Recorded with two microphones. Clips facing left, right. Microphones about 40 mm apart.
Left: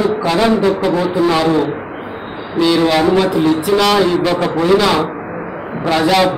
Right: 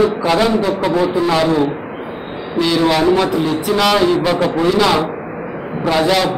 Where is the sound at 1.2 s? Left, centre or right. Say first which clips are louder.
Left 1 dB; centre.